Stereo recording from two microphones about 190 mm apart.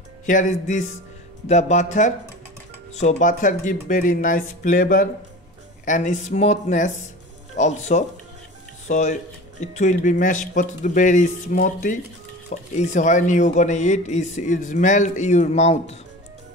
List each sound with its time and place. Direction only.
0.3 s speech: 40° left (ahead or behind)